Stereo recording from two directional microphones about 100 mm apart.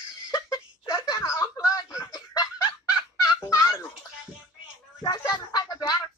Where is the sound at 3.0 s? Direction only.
55° left (ahead or behind).